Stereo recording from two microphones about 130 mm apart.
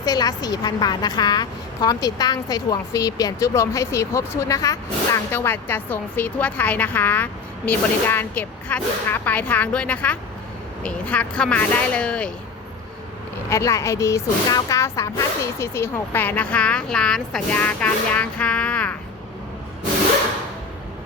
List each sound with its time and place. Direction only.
0.0 s a woman's voice: 30° left (ahead or behind); by 12.3 s 10° left (ahead or behind)
13.5 s a woman's voice: 20° left (ahead or behind)